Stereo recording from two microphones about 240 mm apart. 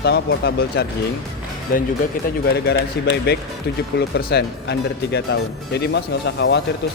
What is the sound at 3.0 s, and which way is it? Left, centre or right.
Speech, left.